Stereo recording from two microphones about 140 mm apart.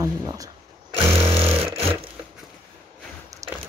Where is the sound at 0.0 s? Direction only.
25° right (ahead or behind).